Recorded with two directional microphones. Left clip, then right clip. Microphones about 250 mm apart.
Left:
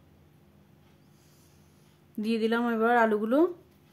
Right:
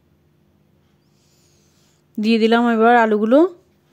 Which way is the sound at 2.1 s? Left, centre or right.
Right.